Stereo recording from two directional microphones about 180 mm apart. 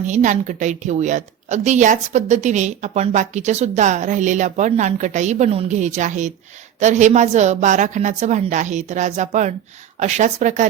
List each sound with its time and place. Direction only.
0.1 s a woman's voice: 45° right (ahead or behind)